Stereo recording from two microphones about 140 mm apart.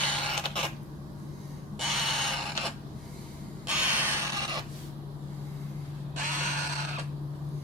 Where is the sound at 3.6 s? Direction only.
10° right (ahead or behind); by 4.7 s 30° right (ahead or behind).